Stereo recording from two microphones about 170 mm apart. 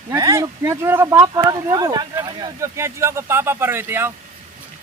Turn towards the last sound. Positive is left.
turn(degrees=-15)  # may be behind; listen again after turning